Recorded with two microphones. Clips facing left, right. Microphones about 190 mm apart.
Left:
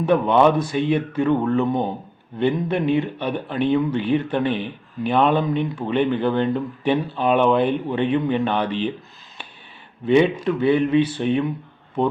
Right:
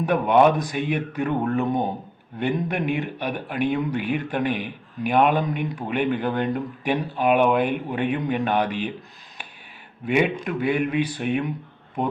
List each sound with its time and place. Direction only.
0.0 s speech: 15° right (ahead or behind)
10.6 s speech: 15° right (ahead or behind)